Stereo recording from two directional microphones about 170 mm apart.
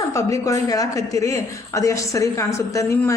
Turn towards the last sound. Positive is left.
turn(degrees=20)  # may be behind; listen again after turning